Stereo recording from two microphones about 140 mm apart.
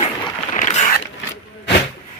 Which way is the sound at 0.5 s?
60° left (ahead or behind).